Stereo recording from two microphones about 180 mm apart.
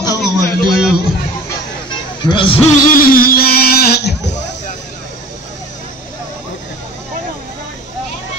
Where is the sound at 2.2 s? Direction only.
25° left (ahead or behind).